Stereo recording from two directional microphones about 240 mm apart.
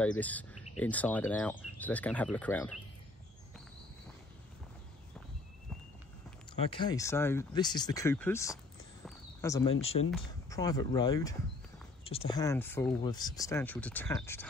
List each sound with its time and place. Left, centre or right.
0.2 s speech: centre
6.5 s speech: left
9.8 s speech: left
10.5 s speech: centre